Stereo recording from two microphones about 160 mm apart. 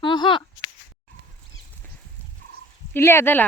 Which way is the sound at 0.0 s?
30° left (ahead or behind).